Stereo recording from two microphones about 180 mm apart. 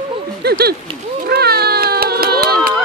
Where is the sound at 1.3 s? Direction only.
60° right (ahead or behind).